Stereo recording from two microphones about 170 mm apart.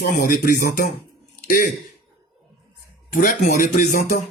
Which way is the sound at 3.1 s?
55° left (ahead or behind).